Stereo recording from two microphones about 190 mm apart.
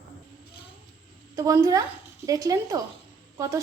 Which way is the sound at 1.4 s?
15° right (ahead or behind).